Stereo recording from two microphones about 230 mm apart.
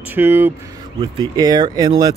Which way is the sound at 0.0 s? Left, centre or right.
Centre.